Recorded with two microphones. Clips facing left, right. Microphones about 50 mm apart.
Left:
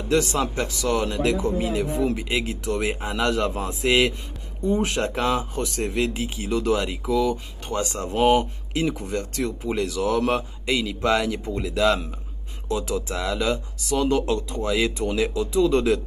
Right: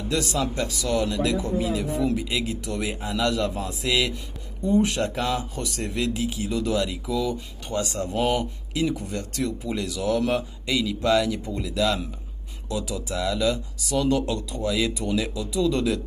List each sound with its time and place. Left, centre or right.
0.1 s speech: left